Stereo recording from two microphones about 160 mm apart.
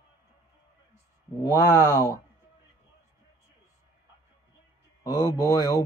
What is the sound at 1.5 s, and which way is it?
Speech, 20° left (ahead or behind).